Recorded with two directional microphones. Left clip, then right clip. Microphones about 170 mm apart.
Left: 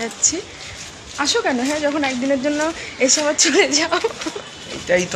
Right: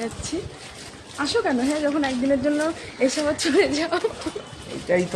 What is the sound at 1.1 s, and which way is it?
Speech, 10° left (ahead or behind).